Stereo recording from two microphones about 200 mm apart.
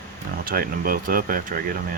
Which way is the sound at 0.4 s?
45° right (ahead or behind).